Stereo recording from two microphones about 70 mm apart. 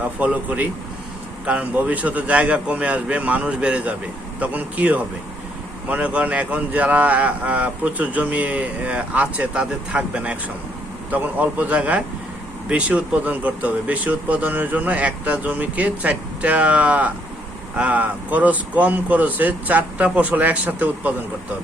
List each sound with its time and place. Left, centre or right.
0.0 s speech: right